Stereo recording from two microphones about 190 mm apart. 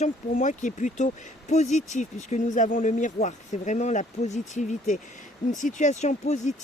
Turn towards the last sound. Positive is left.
turn(degrees=40)  # may be behind; listen again after turning